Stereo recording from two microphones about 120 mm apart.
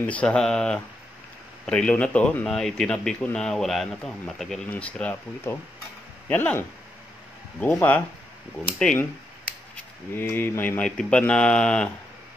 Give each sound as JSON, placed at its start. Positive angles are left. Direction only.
{"t": 0.0, "sound": "speech", "side_deg": 10}
{"t": 5.5, "sound": "speech", "side_deg": 20}
{"t": 7.6, "sound": "speech", "side_deg": 15}
{"t": 10.1, "sound": "speech", "side_deg": 20}
{"t": 10.8, "sound": "speech", "side_deg": 10}